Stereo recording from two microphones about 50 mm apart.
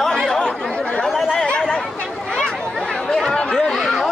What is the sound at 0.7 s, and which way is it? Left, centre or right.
Chatter, left.